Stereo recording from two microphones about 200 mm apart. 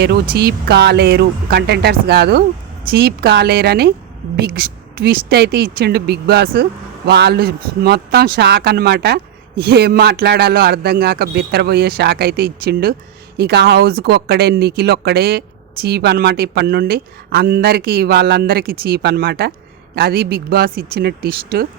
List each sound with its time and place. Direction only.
0.3 s speech: 55° right (ahead or behind)